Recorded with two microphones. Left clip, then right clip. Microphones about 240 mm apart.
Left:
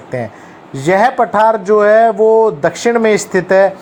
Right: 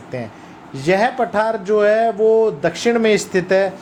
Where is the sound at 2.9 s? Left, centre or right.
Centre.